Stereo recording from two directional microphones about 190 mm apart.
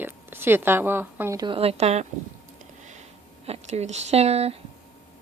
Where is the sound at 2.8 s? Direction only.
40° right (ahead or behind).